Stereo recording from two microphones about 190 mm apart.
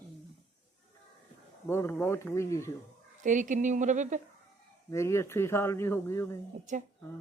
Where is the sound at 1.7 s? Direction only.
10° left (ahead or behind).